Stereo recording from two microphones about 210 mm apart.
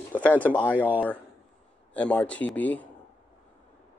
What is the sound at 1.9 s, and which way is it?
Speech, 5° left (ahead or behind).